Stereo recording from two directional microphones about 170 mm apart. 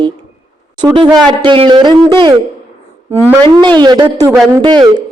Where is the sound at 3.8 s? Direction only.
25° right (ahead or behind).